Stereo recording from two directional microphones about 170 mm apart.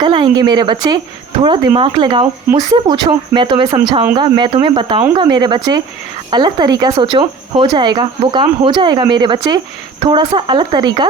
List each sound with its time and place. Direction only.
0.0 s speech: 25° right (ahead or behind)